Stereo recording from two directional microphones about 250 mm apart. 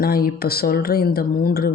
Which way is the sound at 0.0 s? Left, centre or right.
Left.